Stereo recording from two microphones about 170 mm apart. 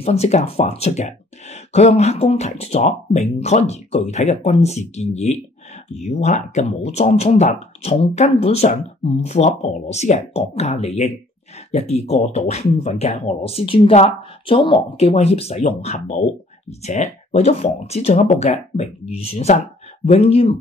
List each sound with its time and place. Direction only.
0.0 s speech: 40° left (ahead or behind)